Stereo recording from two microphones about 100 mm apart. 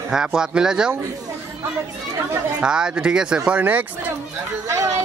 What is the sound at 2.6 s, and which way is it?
Speech, 10° right (ahead or behind).